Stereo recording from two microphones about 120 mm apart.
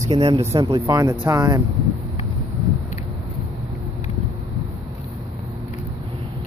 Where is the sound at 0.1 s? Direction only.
50° right (ahead or behind).